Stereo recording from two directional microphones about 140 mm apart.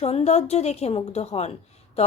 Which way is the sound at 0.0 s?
45° left (ahead or behind).